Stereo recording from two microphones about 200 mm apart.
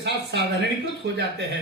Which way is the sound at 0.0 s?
55° right (ahead or behind).